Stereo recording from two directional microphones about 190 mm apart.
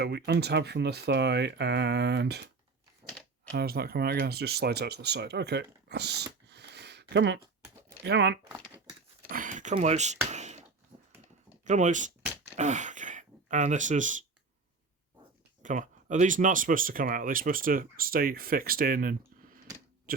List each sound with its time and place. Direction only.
0.0 s speech: 60° right (ahead or behind)
3.5 s speech: 55° right (ahead or behind)
8.4 s speech: 10° right (ahead or behind)
9.2 s speech: 45° right (ahead or behind)
10.3 s a sound: 40° right (ahead or behind)
11.6 s speech: 40° right (ahead or behind)
15.6 s speech: 40° right (ahead or behind)
20.1 s a sound: 50° right (ahead or behind)